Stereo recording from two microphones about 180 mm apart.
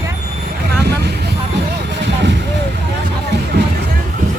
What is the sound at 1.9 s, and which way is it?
Vehicle, 75° right (ahead or behind).